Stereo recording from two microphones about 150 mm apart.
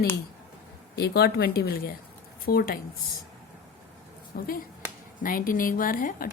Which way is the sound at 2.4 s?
85° left.